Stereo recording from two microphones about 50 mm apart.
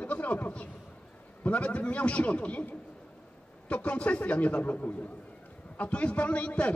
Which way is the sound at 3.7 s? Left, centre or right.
Left.